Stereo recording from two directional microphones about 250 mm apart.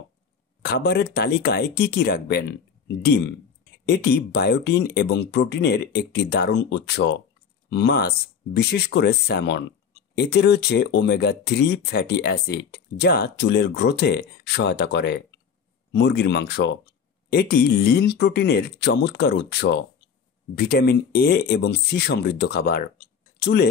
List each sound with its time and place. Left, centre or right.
0.6 s speech: left